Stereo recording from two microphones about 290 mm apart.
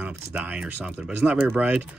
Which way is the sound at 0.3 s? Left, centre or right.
Centre.